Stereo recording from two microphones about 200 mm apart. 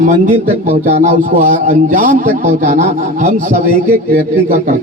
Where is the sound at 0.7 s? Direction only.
30° right (ahead or behind).